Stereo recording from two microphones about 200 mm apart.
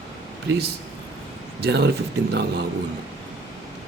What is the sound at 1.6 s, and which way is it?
A man's voice, 55° right (ahead or behind).